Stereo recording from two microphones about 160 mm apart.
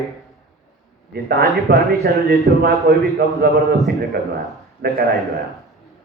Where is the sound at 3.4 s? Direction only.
90° right.